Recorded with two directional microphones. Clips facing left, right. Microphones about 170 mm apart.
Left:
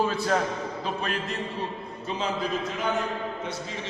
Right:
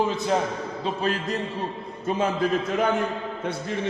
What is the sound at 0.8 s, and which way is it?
Speech, 30° right (ahead or behind).